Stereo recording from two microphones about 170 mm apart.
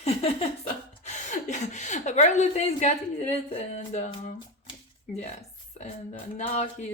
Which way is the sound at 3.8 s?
35° left (ahead or behind).